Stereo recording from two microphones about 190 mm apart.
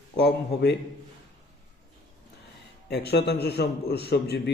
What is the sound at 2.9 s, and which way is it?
A man's voice, 60° left (ahead or behind).